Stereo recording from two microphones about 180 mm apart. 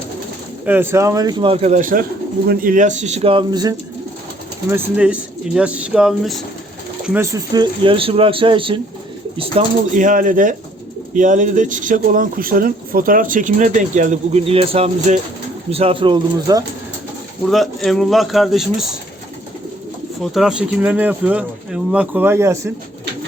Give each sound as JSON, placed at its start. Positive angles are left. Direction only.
{"t": 0.6, "sound": "speech", "side_deg": -10}
{"t": 1.7, "sound": "speech", "side_deg": -50}
{"t": 4.7, "sound": "speech", "side_deg": -5}
{"t": 7.5, "sound": "speech", "side_deg": -25}
{"t": 9.9, "sound": "speech", "side_deg": -45}
{"t": 17.5, "sound": "speech", "side_deg": 0}
{"t": 20.3, "sound": "speech", "side_deg": -5}